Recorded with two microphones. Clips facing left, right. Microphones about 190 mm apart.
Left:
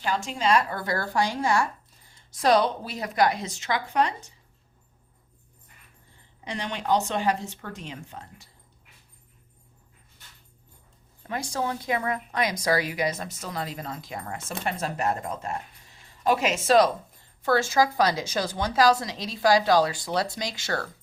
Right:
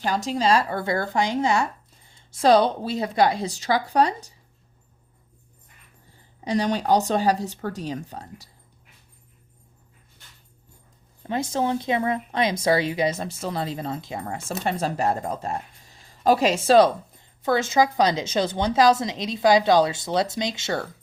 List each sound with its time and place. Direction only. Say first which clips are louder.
0.0 s a woman's voice: right 4 dB; 40° right (ahead or behind)
6.4 s speech: right 9 dB; 35° right (ahead or behind)
11.3 s a woman's voice: right 5 dB; 25° right (ahead or behind)